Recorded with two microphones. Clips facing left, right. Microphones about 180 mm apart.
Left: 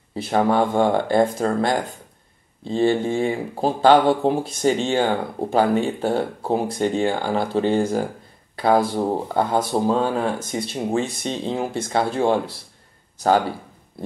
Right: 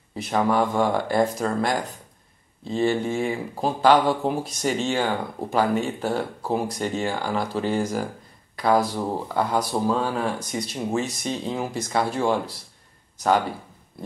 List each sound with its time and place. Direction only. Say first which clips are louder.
0.1 s speech: left 3 dB; 30° left (ahead or behind)